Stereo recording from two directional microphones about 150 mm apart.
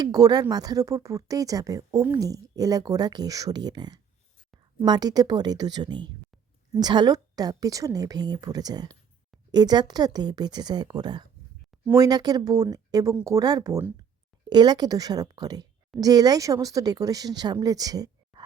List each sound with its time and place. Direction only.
0.0 s speech: 25° right (ahead or behind)